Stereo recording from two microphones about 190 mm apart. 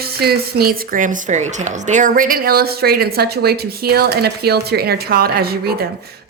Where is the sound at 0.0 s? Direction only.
55° right (ahead or behind).